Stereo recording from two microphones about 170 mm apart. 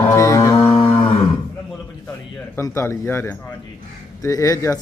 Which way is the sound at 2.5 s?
15° left (ahead or behind).